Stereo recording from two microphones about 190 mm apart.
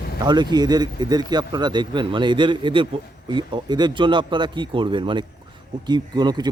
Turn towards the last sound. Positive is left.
turn(degrees=-20)  # may be behind; listen again after turning